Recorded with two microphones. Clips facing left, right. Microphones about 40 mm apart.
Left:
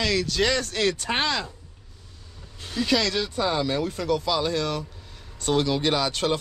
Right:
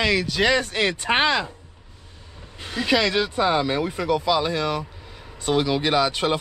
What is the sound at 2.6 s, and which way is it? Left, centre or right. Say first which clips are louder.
Speech: right 3 dB; right.